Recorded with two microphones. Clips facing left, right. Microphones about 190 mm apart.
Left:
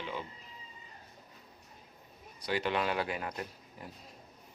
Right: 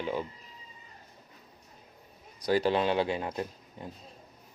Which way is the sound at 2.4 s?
35° right (ahead or behind).